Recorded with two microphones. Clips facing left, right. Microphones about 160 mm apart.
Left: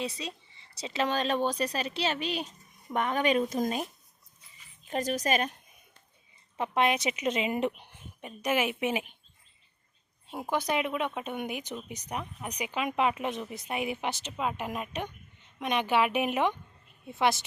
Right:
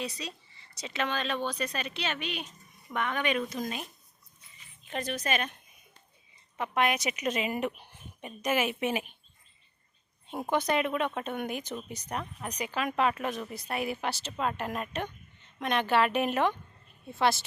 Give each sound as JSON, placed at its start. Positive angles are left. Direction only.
{"t": 0.0, "sound": "a woman's voice", "side_deg": 25}
{"t": 6.6, "sound": "a woman's voice", "side_deg": 25}
{"t": 10.5, "sound": "a woman's voice", "side_deg": 10}